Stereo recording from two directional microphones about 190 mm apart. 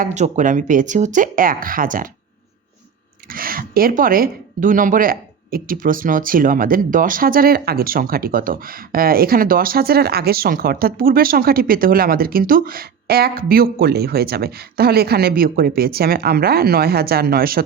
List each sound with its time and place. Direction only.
0.0 s speech: 40° right (ahead or behind)
3.2 s speech: 50° right (ahead or behind)